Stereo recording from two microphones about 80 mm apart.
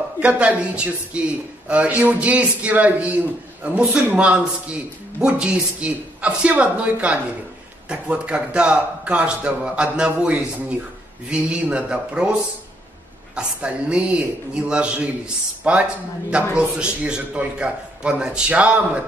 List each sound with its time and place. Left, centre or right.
0.2 s a man's voice: centre